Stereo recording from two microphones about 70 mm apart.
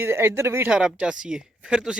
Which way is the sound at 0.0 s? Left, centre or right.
Right.